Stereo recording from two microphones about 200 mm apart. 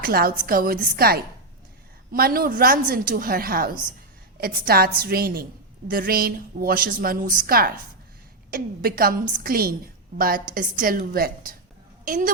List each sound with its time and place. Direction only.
0.0 s a woman's voice: 50° right (ahead or behind)